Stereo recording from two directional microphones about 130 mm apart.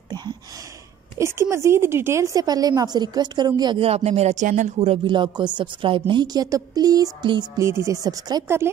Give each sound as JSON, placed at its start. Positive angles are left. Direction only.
{"t": 0.1, "sound": "a sound", "side_deg": -35}
{"t": 1.1, "sound": "speech", "side_deg": -20}
{"t": 3.8, "sound": "speech", "side_deg": -55}
{"t": 5.0, "sound": "a woman's voice", "side_deg": -35}
{"t": 7.5, "sound": "speech", "side_deg": -20}